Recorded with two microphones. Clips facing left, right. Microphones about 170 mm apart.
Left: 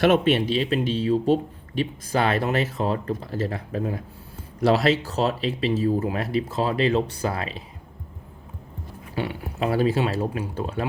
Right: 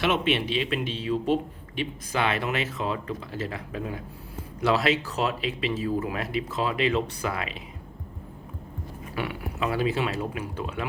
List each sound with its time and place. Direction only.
0.0 s speech: 40° left (ahead or behind)
9.1 s speech: 30° left (ahead or behind)